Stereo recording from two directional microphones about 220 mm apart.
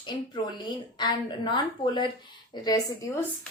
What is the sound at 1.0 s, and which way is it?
A woman's voice, 20° left (ahead or behind).